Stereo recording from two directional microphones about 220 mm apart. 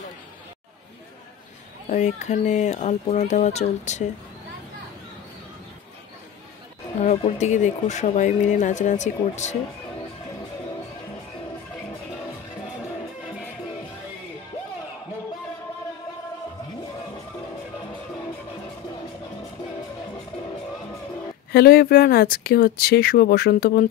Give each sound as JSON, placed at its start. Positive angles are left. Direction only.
{"t": 1.9, "sound": "speech", "side_deg": 30}
{"t": 7.0, "sound": "speech", "side_deg": 30}
{"t": 21.5, "sound": "speech", "side_deg": 45}